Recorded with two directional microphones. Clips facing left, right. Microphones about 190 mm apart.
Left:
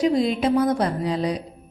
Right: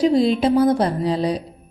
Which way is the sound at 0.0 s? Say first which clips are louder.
Right 4 dB; 30° right (ahead or behind).